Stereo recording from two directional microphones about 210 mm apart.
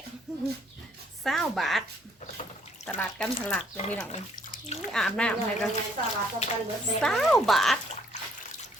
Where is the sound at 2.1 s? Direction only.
35° left (ahead or behind).